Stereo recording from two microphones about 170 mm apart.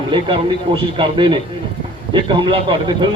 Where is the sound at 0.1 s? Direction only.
30° right (ahead or behind).